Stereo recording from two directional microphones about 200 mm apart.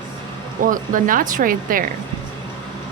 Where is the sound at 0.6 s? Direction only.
40° right (ahead or behind).